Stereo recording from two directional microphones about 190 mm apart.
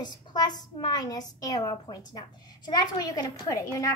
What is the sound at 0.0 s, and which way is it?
A child's voice, 20° left (ahead or behind).